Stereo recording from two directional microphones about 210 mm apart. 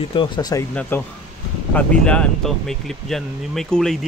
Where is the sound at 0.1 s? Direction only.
20° left (ahead or behind).